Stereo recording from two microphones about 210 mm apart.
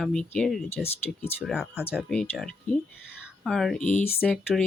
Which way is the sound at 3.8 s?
35° left (ahead or behind).